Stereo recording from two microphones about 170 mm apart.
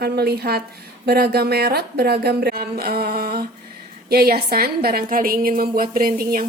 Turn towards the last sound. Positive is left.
turn(degrees=-55)  # may be behind; listen again after turning